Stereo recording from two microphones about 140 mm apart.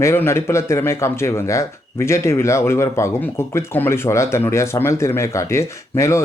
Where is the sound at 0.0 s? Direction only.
20° left (ahead or behind).